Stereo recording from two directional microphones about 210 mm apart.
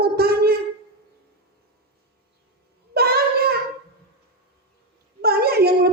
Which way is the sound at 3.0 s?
45° right (ahead or behind).